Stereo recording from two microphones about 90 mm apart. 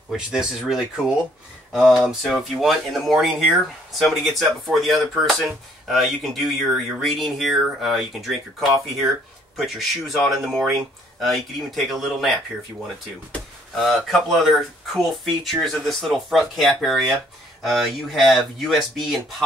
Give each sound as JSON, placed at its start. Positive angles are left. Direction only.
{"t": 0.1, "sound": "speech", "side_deg": -10}
{"t": 13.7, "sound": "speech", "side_deg": 0}